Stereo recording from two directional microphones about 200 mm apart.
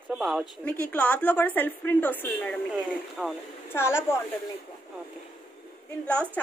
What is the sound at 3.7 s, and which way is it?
Speech, 10° left (ahead or behind).